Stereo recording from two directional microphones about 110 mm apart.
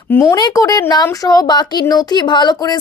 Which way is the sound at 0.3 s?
35° left (ahead or behind).